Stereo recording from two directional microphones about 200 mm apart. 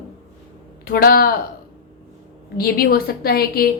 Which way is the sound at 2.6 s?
50° left (ahead or behind).